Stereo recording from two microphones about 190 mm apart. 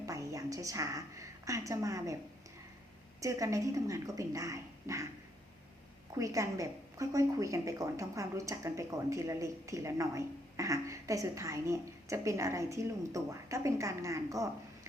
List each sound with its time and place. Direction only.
0.0 s a woman's voice: 15° right (ahead or behind)
3.2 s a woman's voice: 15° right (ahead or behind)
6.1 s a woman's voice: 15° right (ahead or behind)